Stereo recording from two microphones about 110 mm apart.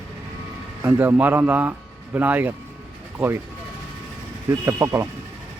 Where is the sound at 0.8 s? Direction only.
20° right (ahead or behind).